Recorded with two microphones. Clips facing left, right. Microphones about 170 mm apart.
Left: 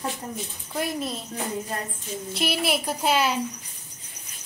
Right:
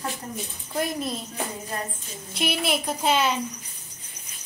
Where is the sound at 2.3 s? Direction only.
5° left (ahead or behind).